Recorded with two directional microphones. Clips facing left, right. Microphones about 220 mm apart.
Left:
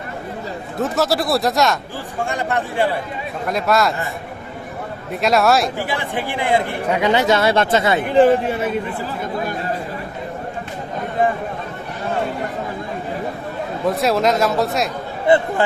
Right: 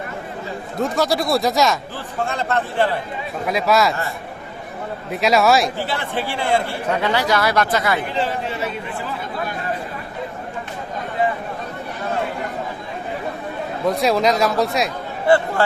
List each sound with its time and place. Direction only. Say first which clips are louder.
0.8 s speech: left 1 dB; 5° left (ahead or behind)
2.2 s speech: even; 15° left (ahead or behind)
3.4 s speech: even; centre (ahead or behind)
5.2 s speech: even; centre (ahead or behind)
5.9 s speech: left 1 dB; 15° left (ahead or behind)
8.1 s speech: left 10 dB; 50° left (ahead or behind)
13.8 s speech: even; centre (ahead or behind)
15.3 s speech: left 1 dB; 20° left (ahead or behind)